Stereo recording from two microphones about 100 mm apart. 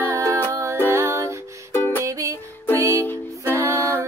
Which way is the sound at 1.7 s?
20° left (ahead or behind).